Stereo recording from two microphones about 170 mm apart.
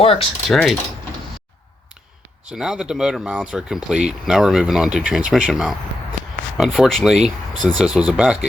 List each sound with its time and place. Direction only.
0.0 s a sound: 35° left (ahead or behind)
0.4 s speech: centre (ahead or behind)
2.5 s speech: 5° right (ahead or behind)